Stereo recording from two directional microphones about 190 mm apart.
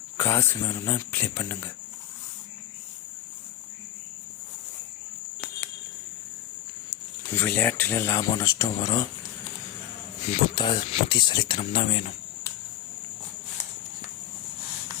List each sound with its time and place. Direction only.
0.2 s speech: 15° left (ahead or behind)
6.9 s speech: 10° left (ahead or behind)
10.3 s speech: 20° left (ahead or behind)